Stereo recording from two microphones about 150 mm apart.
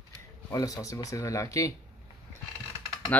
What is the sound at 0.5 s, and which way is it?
Speech, 20° left (ahead or behind).